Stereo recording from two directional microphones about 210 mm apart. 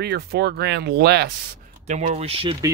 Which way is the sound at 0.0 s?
50° right (ahead or behind).